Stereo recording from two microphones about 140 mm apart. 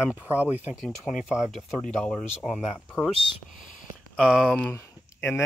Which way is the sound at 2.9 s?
15° left (ahead or behind).